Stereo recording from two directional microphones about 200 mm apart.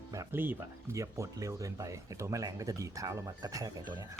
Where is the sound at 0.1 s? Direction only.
15° right (ahead or behind).